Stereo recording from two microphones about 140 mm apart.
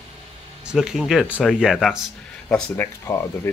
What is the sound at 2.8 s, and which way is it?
Speech, 15° left (ahead or behind).